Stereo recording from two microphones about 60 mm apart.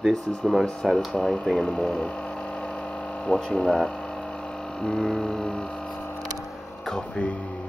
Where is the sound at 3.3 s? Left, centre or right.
Centre.